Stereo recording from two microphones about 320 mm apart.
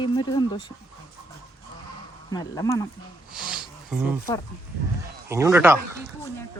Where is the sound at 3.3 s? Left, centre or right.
Centre.